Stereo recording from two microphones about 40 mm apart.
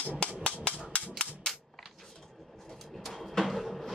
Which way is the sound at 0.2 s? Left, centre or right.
Left.